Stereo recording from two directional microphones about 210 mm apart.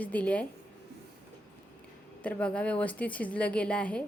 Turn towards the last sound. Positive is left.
turn(degrees=5)  # may be behind; listen again after turning